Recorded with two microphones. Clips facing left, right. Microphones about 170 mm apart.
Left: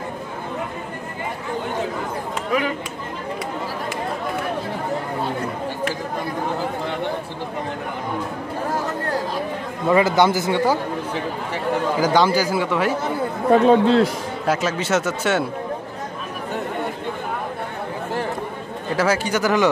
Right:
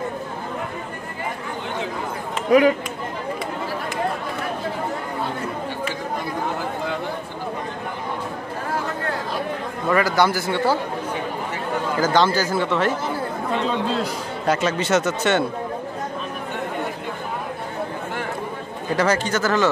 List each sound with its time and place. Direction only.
9.8 s speech: 20° left (ahead or behind)
12.0 s speech: 15° left (ahead or behind)
13.5 s speech: 55° left (ahead or behind)
14.4 s speech: 5° left (ahead or behind)
18.9 s speech: 10° left (ahead or behind)